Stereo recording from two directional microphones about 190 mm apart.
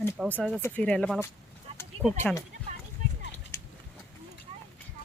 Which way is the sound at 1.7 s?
30° right (ahead or behind).